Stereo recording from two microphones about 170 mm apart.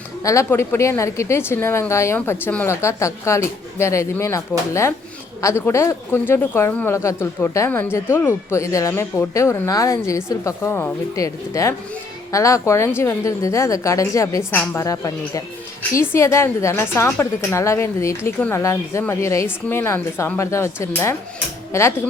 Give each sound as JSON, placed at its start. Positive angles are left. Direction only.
{"t": 0.2, "sound": "speech", "side_deg": 20}